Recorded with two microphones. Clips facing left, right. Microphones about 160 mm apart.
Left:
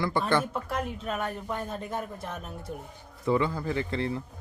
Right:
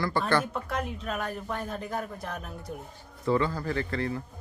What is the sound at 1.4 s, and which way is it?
Speech, centre (ahead or behind).